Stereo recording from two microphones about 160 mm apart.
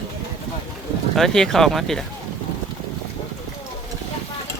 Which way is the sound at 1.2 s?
Centre (ahead or behind).